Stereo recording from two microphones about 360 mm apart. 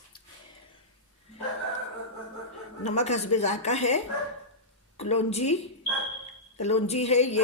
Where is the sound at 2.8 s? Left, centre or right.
Centre.